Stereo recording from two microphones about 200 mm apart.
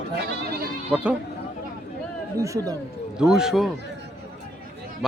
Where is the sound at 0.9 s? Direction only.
5° right (ahead or behind).